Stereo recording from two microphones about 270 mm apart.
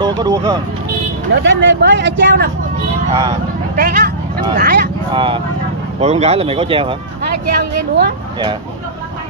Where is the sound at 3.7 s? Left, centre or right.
Right.